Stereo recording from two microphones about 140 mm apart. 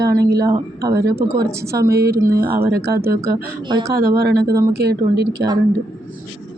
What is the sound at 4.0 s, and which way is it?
Speech, 90° right.